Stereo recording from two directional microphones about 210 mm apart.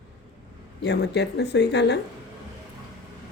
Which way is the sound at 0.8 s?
55° left (ahead or behind).